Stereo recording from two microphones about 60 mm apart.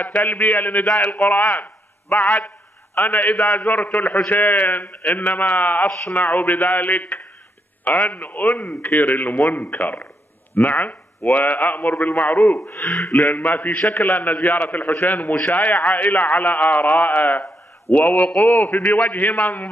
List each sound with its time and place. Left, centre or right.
0.0 s a man's voice: left